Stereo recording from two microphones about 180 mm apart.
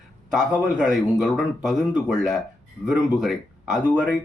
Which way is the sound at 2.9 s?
Centre (ahead or behind).